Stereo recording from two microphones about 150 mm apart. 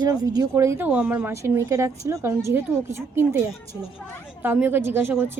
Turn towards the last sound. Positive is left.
turn(degrees=-15)  # may be behind; listen again after turning